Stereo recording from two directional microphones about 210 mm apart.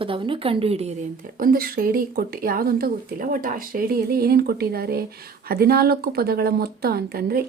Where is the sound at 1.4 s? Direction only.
45° right (ahead or behind).